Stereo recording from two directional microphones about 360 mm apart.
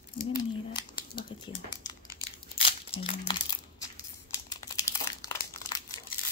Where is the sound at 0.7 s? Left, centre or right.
Centre.